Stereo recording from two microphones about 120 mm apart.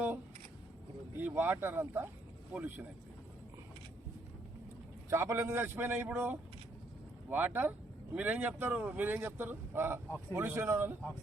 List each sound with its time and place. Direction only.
1.2 s speech: 20° right (ahead or behind)
5.0 s a man's voice: 20° right (ahead or behind)